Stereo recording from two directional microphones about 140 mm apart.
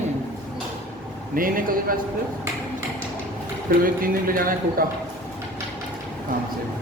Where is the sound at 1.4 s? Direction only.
80° right.